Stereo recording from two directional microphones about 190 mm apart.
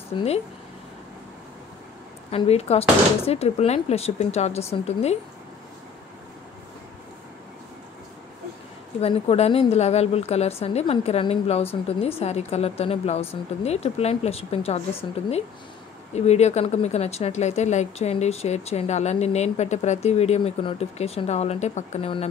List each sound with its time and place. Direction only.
2.3 s a woman's voice: 35° left (ahead or behind)
9.0 s a woman's voice: 30° left (ahead or behind)